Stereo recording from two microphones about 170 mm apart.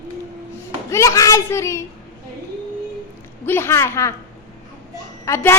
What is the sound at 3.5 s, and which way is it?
Speech, 15° left (ahead or behind).